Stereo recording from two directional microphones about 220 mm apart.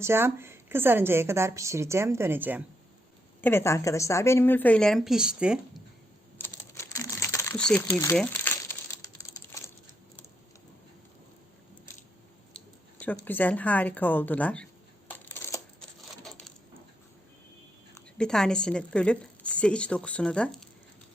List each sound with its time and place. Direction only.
0.0 s a woman's voice: 10° right (ahead or behind)
3.4 s a woman's voice: 10° left (ahead or behind); by 5.8 s 5° right (ahead or behind)
6.4 s crumpling: 10° left (ahead or behind)
12.5 s a sound: 5° left (ahead or behind)
17.9 s a woman's voice: 5° left (ahead or behind)